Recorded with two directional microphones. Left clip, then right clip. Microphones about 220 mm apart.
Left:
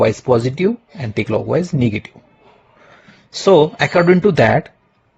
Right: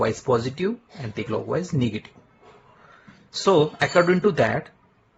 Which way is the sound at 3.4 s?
30° left (ahead or behind).